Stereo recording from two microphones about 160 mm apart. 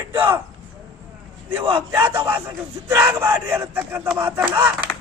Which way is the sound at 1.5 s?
15° right (ahead or behind).